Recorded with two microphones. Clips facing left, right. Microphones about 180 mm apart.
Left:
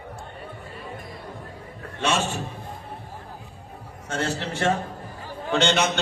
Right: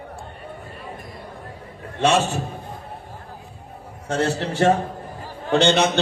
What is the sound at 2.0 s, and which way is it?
Speech, 40° right (ahead or behind).